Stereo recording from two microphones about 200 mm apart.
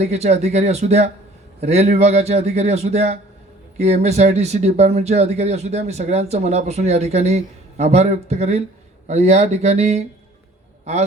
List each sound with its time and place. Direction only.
0.0 s speech: 35° right (ahead or behind)